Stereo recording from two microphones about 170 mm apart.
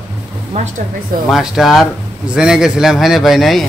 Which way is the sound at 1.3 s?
Centre (ahead or behind).